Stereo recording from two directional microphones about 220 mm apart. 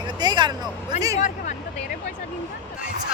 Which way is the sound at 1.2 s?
35° left (ahead or behind).